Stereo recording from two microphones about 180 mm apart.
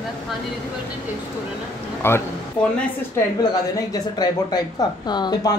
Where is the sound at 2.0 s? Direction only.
15° left (ahead or behind).